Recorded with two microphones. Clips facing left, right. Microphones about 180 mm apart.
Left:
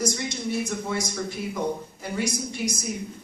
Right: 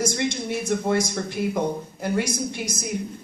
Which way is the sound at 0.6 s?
55° right (ahead or behind).